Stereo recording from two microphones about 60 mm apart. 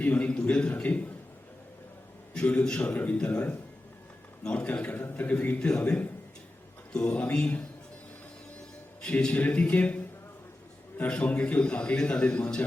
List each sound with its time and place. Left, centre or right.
0.0 s a man's voice: left
2.3 s a man's voice: left
4.4 s a man's voice: centre
5.8 s a man's voice: left
9.0 s a man's voice: centre